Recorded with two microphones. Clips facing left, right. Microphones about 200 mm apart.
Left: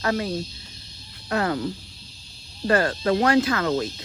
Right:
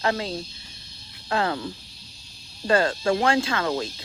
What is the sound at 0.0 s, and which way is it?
Speech, 25° right (ahead or behind).